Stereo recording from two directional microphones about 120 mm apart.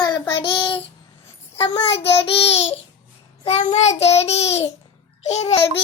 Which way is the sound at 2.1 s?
55° left (ahead or behind).